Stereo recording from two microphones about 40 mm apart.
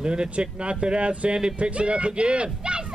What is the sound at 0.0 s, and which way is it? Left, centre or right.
Speech, right.